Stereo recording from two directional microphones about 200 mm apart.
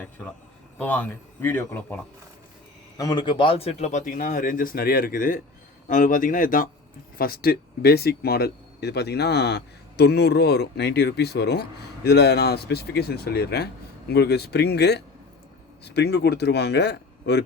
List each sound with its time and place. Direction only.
0.8 s speech: 10° left (ahead or behind)
3.0 s a man's voice: 20° left (ahead or behind); by 17.4 s 55° left (ahead or behind)